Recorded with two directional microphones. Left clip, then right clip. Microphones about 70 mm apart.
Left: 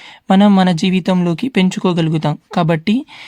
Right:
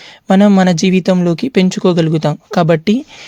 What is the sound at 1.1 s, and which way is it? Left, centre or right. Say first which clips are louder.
Speech: right 3 dB; centre.